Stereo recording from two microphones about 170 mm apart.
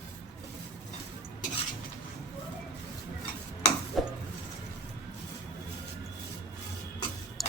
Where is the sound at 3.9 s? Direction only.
Centre (ahead or behind).